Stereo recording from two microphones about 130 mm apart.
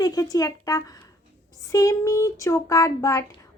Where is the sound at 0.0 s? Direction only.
30° left (ahead or behind).